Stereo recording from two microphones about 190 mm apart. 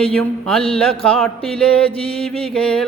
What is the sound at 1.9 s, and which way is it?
Mantra, 30° left (ahead or behind).